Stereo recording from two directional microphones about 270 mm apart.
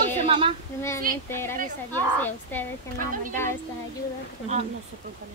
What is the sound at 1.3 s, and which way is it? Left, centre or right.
A woman's voice, centre.